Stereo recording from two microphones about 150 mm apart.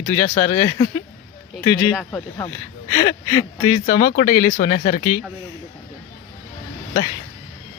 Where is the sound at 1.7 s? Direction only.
15° left (ahead or behind).